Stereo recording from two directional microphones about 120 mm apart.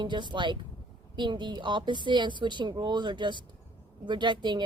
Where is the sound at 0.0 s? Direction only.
40° right (ahead or behind).